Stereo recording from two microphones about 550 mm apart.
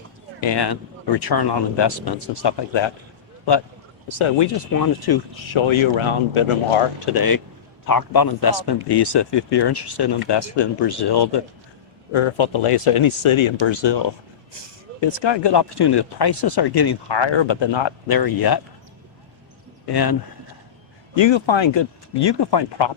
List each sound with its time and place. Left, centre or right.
0.4 s speech: left
4.2 s speech: left
4.7 s speech: left
5.5 s speech: left
7.1 s speech: left
12.1 s speech: left
18.1 s speech: left
19.9 s speech: left
21.2 s speech: left